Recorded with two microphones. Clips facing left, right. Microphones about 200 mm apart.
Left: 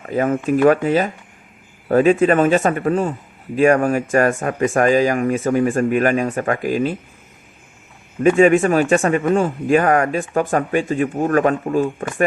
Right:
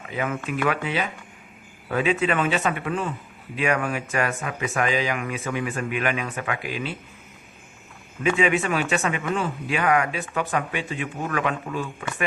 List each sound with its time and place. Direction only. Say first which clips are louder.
0.0 s a man's voice: left 9 dB; 45° left (ahead or behind)
8.2 s a man's voice: left 10 dB; 45° left (ahead or behind)